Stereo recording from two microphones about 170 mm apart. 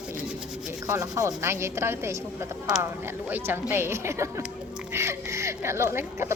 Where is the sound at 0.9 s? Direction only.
20° right (ahead or behind).